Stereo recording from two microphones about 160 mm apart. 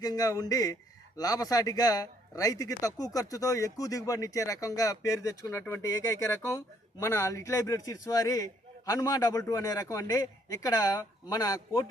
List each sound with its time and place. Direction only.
0.0 s a man's voice: 20° left (ahead or behind)